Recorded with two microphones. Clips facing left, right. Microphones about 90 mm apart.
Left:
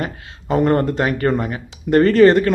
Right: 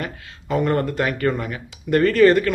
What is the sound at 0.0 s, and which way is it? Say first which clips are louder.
A man's voice: left 4 dB; 35° left (ahead or behind).